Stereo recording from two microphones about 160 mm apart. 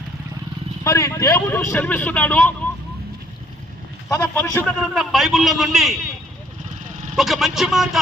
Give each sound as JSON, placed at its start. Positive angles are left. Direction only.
{"t": 0.9, "sound": "speech", "side_deg": 20}
{"t": 4.2, "sound": "speech", "side_deg": 10}
{"t": 4.8, "sound": "a man's voice", "side_deg": 0}
{"t": 7.2, "sound": "a man's voice", "side_deg": 0}